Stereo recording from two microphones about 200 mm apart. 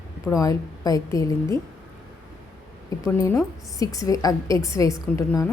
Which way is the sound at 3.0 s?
15° left (ahead or behind).